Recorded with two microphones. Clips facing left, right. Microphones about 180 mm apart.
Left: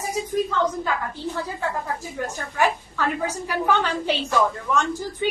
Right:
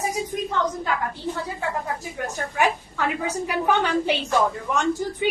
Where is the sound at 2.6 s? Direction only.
15° right (ahead or behind).